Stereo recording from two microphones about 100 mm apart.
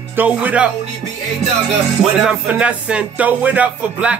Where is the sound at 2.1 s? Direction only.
10° right (ahead or behind).